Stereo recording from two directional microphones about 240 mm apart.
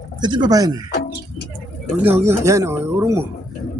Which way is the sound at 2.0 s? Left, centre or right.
Centre.